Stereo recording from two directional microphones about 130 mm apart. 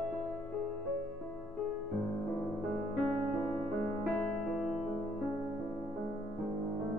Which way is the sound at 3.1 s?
5° left (ahead or behind).